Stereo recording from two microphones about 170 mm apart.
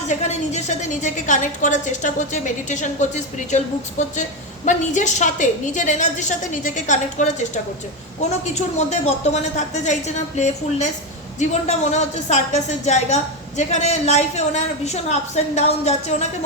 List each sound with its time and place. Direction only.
0.1 s a woman's voice: 45° left (ahead or behind)